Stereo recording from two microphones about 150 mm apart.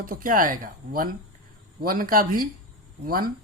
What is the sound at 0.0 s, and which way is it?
Speech, 70° right (ahead or behind).